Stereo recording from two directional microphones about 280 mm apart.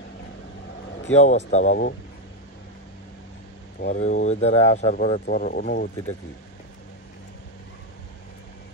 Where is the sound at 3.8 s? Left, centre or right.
Left.